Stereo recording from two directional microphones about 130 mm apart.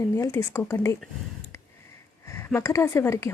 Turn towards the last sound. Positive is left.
turn(degrees=20)  # may be behind; listen again after turning